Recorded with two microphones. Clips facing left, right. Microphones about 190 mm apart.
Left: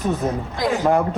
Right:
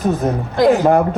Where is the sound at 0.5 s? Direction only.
65° right (ahead or behind).